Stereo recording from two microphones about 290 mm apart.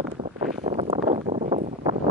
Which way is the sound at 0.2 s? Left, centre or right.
Centre.